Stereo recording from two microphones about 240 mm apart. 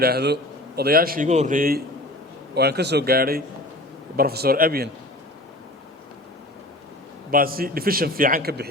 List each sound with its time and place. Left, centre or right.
0.0 s a man's voice: right
7.3 s a man's voice: right